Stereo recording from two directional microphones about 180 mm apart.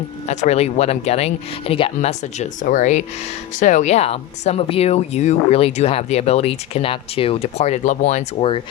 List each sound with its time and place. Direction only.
0.3 s speech: 35° left (ahead or behind)